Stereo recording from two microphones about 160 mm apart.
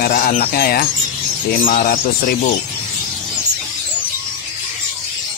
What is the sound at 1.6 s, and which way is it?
Speech, 60° left (ahead or behind).